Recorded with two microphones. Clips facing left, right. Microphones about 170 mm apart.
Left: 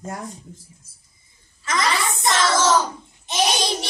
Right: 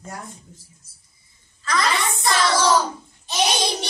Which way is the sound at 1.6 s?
20° left (ahead or behind).